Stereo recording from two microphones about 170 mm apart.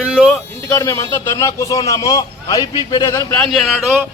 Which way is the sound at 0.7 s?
20° left (ahead or behind).